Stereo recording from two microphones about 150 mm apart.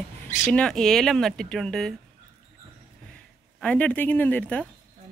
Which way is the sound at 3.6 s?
10° left (ahead or behind).